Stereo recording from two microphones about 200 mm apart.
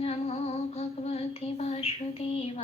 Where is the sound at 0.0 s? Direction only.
30° left (ahead or behind).